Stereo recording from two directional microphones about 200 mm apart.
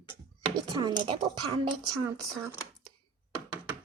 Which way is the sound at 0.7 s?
20° right (ahead or behind).